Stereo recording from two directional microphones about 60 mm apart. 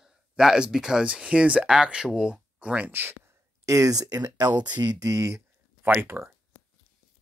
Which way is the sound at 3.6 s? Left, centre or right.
Right.